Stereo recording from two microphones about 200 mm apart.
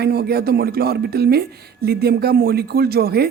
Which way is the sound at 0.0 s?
50° right (ahead or behind).